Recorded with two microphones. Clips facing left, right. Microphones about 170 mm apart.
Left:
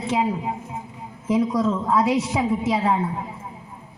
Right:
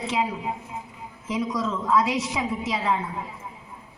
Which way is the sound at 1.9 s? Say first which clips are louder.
Even; 45° left (ahead or behind).